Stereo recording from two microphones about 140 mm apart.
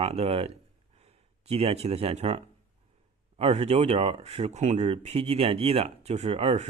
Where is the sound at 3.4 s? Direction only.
45° right (ahead or behind).